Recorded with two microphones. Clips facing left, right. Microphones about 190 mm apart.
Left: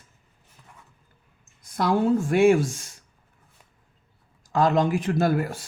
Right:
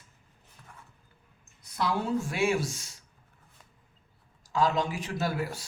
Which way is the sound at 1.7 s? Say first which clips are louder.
Left 7 dB; 50° left (ahead or behind).